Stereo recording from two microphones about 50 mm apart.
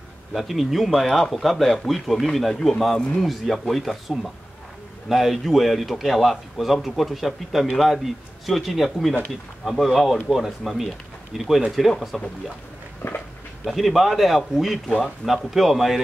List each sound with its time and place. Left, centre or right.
0.3 s a man's voice: centre
13.0 s speech: left
13.7 s a man's voice: centre